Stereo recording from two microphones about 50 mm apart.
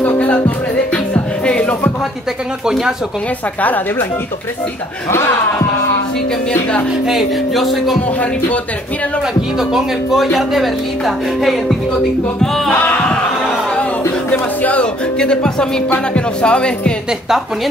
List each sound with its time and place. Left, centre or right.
0.9 s music: left
7.1 s speech: centre
9.6 s speech: centre
12.7 s a sound: left
14.3 s speech: left
15.1 s speech: centre